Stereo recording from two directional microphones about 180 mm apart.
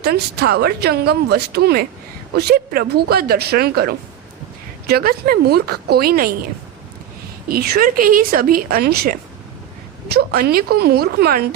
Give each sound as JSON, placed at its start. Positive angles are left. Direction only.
{"t": 0.0, "sound": "a woman's voice", "side_deg": -60}
{"t": 7.4, "sound": "a woman's voice", "side_deg": -55}